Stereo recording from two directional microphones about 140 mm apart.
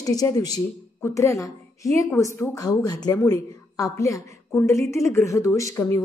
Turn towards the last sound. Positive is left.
turn(degrees=20)  # may be behind; listen again after turning